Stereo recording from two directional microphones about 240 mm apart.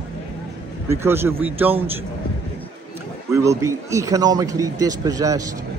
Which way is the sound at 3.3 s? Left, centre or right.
Centre.